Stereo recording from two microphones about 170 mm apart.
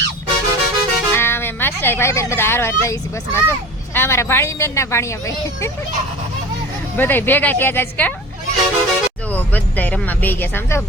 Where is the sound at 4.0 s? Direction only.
15° left (ahead or behind).